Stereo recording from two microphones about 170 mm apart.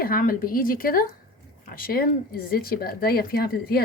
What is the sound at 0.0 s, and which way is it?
A woman's voice, 55° left (ahead or behind).